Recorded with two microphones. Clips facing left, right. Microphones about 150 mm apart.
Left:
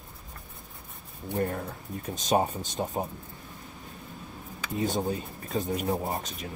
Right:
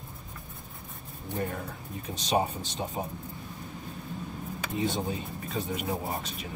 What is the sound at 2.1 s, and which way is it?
Speech, 45° left (ahead or behind).